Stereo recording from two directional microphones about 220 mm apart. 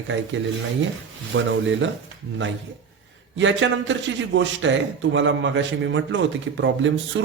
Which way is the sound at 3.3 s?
60° right (ahead or behind).